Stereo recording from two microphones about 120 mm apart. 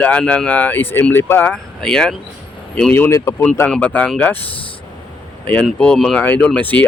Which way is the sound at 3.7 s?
10° left (ahead or behind).